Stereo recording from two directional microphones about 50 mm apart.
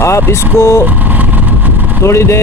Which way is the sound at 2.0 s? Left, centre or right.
Left.